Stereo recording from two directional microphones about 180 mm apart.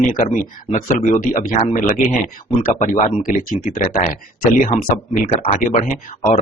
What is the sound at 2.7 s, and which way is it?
Speech, 45° left (ahead or behind).